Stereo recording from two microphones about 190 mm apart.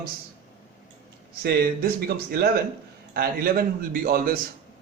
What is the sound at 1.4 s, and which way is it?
A man's voice, 55° right (ahead or behind).